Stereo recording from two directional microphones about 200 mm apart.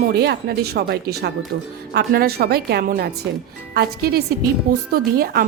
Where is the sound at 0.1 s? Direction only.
55° right (ahead or behind).